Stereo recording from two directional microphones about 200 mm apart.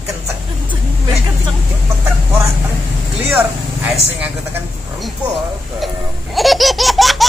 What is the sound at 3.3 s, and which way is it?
Speech, 5° right (ahead or behind).